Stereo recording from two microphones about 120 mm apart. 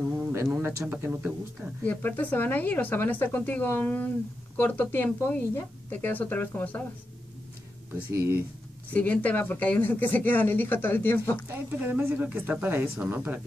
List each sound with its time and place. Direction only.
0.3 s speech: 20° right (ahead or behind)
1.8 s speech: 15° left (ahead or behind)
7.9 s speech: 20° right (ahead or behind)
8.9 s speech: 10° left (ahead or behind)
11.4 s speech: 15° right (ahead or behind)